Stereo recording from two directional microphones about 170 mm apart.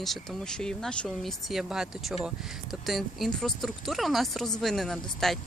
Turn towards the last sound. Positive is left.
turn(degrees=0)  # may be behind; listen again after turning